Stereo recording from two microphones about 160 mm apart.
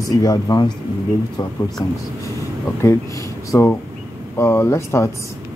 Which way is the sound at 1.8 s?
30° left (ahead or behind).